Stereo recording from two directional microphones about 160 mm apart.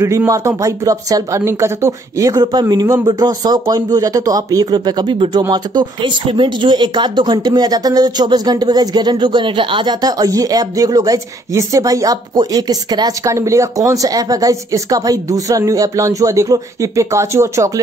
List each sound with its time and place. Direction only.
0.0 s speech: 15° right (ahead or behind)